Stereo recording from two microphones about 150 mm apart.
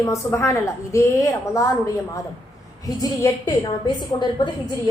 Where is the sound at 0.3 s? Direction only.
15° left (ahead or behind).